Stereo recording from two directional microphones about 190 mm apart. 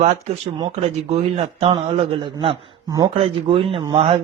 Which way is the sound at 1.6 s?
25° right (ahead or behind).